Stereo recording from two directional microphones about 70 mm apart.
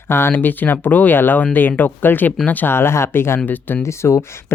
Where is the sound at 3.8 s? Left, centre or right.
Left.